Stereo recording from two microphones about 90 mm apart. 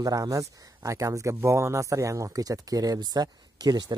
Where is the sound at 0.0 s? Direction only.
40° right (ahead or behind).